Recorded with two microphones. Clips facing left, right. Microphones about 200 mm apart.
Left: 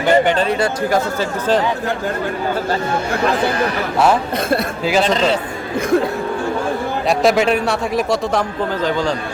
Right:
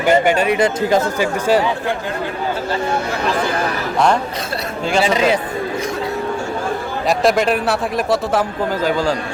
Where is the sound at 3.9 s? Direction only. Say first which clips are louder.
Left 1 dB; 5° left (ahead or behind).